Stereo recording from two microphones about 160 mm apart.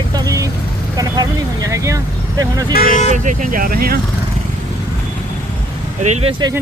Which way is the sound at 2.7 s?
65° left (ahead or behind).